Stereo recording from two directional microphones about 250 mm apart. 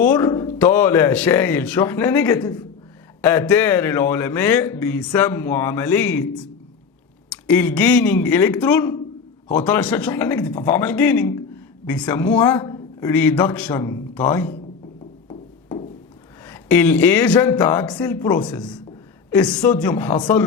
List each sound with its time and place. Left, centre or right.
0.0 s a man's voice: centre
7.3 s a man's voice: centre
15.3 s music: centre
16.5 s a man's voice: centre